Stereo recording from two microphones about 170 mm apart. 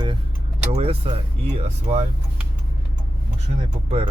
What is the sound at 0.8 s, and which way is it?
Speech, 35° right (ahead or behind).